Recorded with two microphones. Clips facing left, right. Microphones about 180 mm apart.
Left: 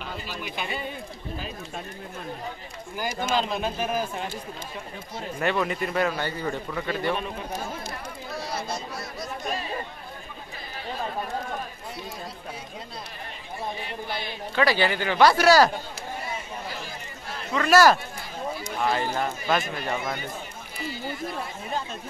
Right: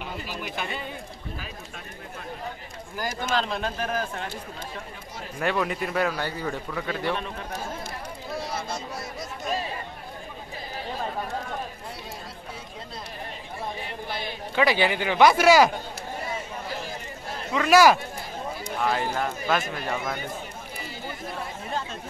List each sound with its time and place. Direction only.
0.0 s a sound: 10° right (ahead or behind)
3.3 s speech: 5° left (ahead or behind)
5.4 s a man's voice: centre (ahead or behind)
7.1 s speech: 10° left (ahead or behind)
8.4 s speech: 25° right (ahead or behind)
14.5 s speech: 15° right (ahead or behind)
17.5 s speech: 10° right (ahead or behind)
18.8 s a man's voice: centre (ahead or behind)